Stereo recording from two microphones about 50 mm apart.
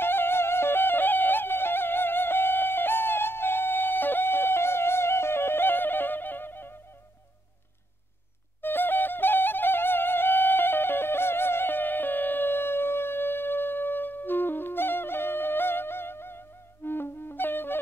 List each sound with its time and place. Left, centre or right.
0.0 s music: left
8.5 s music: left